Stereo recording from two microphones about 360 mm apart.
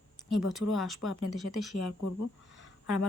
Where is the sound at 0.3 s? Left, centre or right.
Centre.